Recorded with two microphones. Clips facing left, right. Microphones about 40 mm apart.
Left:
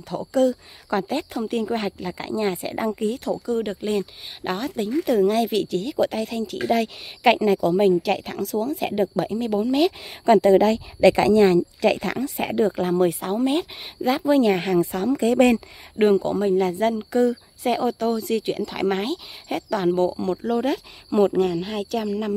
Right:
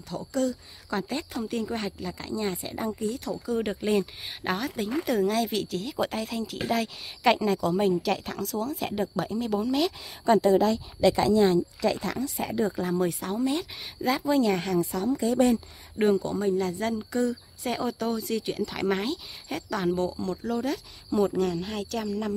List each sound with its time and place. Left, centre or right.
0.3 s speech: centre
1.8 s speech: left
2.6 s speech: left
3.4 s speech: centre
5.3 s speech: centre
7.3 s speech: centre
10.2 s speech: left
13.1 s speech: left
15.0 s speech: left
16.0 s speech: left; by 17.9 s centre
17.9 s speech: centre
18.7 s speech: left